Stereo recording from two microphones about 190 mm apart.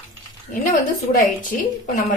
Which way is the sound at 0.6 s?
40° left (ahead or behind).